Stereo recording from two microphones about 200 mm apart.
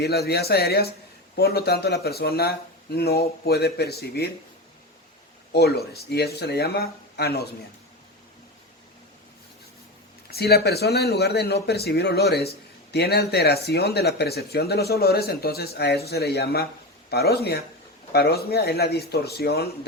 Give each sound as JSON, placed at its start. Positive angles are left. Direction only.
{"t": 0.0, "sound": "speech", "side_deg": 55}
{"t": 5.5, "sound": "speech", "side_deg": 55}
{"t": 10.2, "sound": "speech", "side_deg": 50}